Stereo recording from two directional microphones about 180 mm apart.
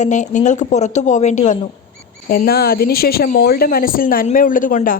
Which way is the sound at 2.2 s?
55° left (ahead or behind).